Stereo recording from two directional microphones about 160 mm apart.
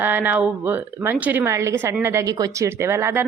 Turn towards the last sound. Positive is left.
turn(degrees=-15)  # may be behind; listen again after turning